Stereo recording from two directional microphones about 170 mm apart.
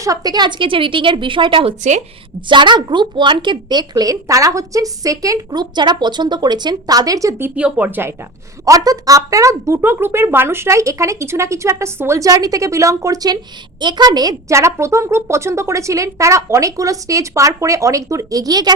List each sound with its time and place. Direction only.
0.0 s a woman's voice: 20° right (ahead or behind)